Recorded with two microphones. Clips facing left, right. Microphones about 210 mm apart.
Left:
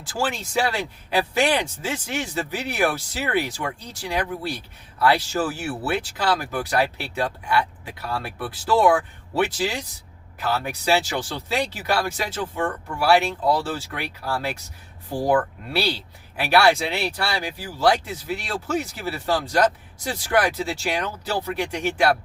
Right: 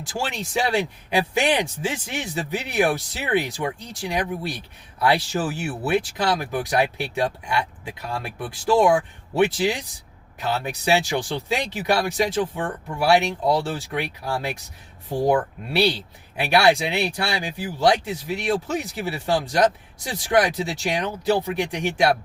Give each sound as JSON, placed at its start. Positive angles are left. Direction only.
{"t": 0.0, "sound": "speech", "side_deg": -15}